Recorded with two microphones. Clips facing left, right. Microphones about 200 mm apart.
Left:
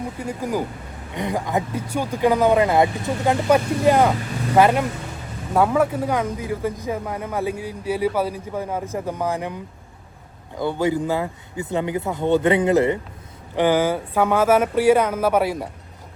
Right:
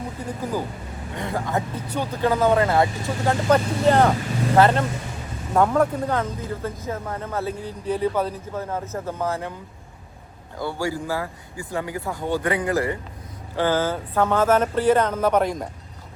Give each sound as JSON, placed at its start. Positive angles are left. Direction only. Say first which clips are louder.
{"t": 1.1, "sound": "speech", "louder": "left 3 dB", "side_deg": 15}
{"t": 10.6, "sound": "speech", "louder": "left 5 dB", "side_deg": 20}